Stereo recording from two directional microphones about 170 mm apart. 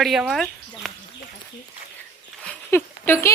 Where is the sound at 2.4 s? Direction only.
10° left (ahead or behind).